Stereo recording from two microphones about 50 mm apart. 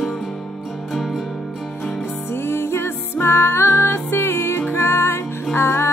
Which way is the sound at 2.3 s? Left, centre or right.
Left.